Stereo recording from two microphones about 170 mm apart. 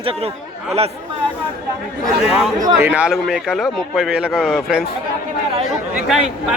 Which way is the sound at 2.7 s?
15° right (ahead or behind).